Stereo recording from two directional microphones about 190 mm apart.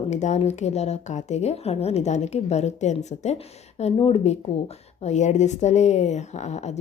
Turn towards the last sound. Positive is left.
turn(degrees=35)  # may be behind; listen again after turning